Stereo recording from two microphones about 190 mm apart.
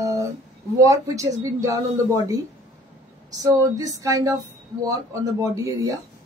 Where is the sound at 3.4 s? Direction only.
20° right (ahead or behind).